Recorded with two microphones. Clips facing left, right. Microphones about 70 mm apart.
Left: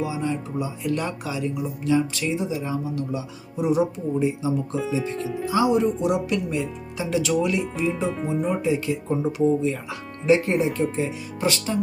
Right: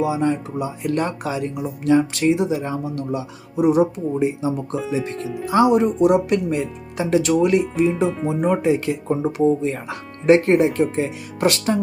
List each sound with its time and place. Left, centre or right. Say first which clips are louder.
0.0 s speech: right 6 dB; right
8.0 s speech: right 4 dB; centre
8.4 s speech: right 6 dB; right